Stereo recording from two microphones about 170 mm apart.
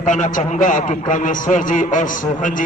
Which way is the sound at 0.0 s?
50° left (ahead or behind).